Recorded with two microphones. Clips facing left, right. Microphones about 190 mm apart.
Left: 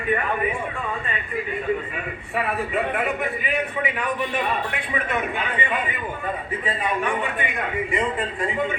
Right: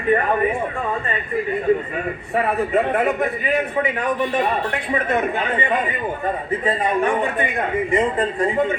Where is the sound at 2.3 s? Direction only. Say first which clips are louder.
Right 5 dB; 40° right (ahead or behind).